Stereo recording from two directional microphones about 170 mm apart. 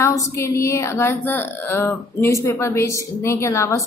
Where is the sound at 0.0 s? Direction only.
15° left (ahead or behind).